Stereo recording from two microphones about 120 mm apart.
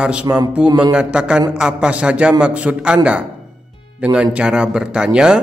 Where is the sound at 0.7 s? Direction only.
35° right (ahead or behind).